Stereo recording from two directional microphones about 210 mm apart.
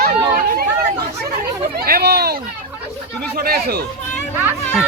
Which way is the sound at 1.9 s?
50° right (ahead or behind).